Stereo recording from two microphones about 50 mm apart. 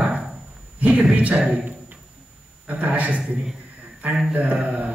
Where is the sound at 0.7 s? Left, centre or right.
Right.